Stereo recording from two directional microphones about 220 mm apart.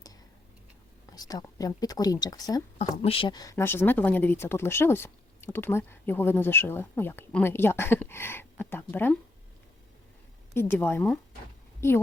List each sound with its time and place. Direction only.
1.1 s speech: 15° left (ahead or behind)
10.5 s speech: 10° left (ahead or behind)